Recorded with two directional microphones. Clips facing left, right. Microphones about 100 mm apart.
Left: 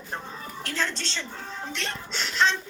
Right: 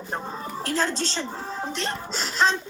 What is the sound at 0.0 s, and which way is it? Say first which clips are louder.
A woman's voice: right 5 dB; 30° right (ahead or behind).